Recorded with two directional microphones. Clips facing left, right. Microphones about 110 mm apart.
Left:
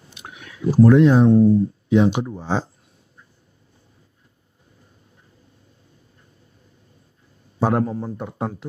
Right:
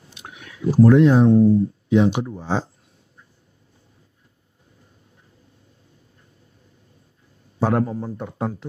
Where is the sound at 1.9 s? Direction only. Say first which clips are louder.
Left 1 dB; 25° left (ahead or behind).